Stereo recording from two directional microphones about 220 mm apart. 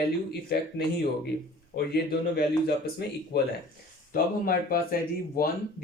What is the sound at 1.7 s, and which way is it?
Speech, 45° left (ahead or behind).